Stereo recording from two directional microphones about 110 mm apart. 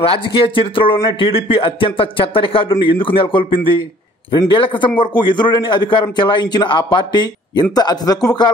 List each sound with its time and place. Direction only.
0.0 s a man's voice: 55° left (ahead or behind); by 8.5 s 35° left (ahead or behind)